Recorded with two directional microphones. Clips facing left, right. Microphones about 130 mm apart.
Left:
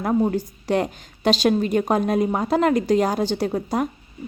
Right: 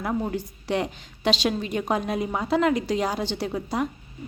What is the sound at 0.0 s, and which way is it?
A woman's voice, 45° left (ahead or behind).